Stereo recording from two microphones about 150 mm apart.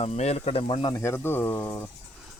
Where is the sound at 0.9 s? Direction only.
15° left (ahead or behind).